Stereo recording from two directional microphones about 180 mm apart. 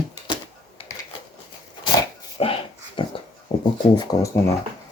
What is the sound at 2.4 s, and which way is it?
Dog, 30° left (ahead or behind).